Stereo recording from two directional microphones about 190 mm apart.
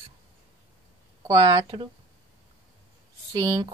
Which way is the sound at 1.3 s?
20° right (ahead or behind).